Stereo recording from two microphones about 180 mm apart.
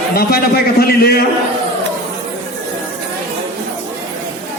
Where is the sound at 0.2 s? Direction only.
60° left (ahead or behind).